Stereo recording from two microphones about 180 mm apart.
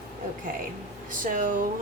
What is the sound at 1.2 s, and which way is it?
Speech, 50° right (ahead or behind).